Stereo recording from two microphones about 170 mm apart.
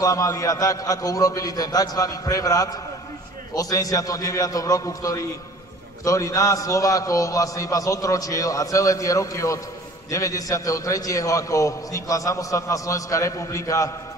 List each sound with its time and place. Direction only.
0.0 s a man's voice: 20° left (ahead or behind)